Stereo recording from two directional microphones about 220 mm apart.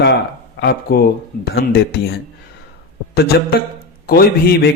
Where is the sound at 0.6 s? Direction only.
45° left (ahead or behind).